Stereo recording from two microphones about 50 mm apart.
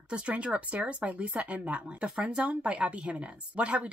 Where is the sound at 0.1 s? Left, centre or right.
Right.